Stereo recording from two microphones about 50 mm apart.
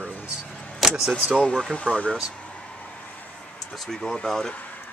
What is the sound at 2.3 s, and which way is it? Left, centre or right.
Vehicle, left.